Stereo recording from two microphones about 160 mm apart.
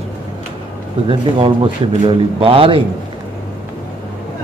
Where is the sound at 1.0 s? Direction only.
35° right (ahead or behind).